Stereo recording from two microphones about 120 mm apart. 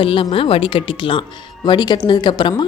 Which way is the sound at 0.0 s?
45° left (ahead or behind).